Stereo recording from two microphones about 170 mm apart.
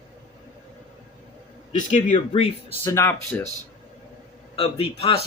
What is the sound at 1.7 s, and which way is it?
Speech, 45° left (ahead or behind).